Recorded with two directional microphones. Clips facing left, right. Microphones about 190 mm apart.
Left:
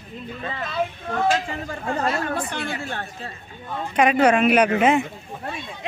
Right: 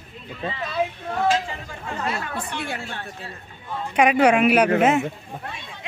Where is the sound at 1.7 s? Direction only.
45° left (ahead or behind).